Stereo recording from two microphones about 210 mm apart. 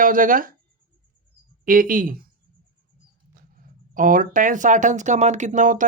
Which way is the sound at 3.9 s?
40° right (ahead or behind).